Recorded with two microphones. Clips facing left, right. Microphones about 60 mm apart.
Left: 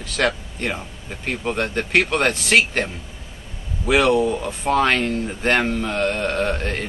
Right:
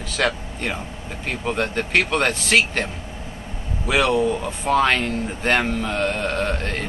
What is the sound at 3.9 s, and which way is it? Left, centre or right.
Speech, centre.